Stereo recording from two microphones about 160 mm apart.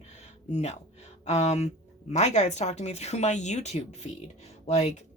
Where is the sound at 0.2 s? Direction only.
45° left (ahead or behind).